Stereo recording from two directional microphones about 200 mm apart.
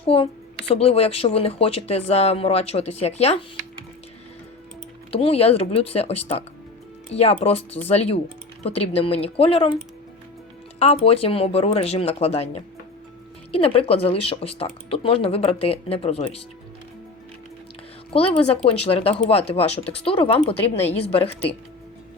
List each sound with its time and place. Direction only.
0.0 s a woman's voice: 30° left (ahead or behind)
5.1 s speech: 30° left (ahead or behind)
10.8 s speech: 30° left (ahead or behind)
18.1 s speech: 30° left (ahead or behind)